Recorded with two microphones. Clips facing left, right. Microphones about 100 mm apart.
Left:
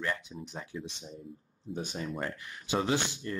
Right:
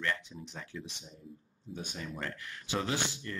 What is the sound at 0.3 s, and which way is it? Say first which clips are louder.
Speech: left 4 dB; 25° left (ahead or behind).